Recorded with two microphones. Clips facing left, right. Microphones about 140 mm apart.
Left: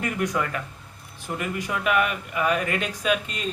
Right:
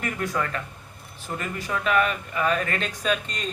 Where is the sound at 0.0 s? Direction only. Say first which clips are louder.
Left 2 dB; 15° left (ahead or behind).